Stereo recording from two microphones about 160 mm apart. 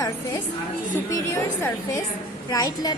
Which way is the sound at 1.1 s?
20° left (ahead or behind).